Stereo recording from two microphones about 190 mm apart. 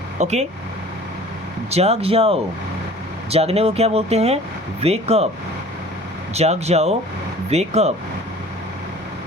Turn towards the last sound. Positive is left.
turn(degrees=-35)  # may be behind; listen again after turning